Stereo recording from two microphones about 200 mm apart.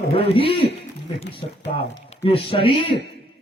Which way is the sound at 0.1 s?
25° left (ahead or behind).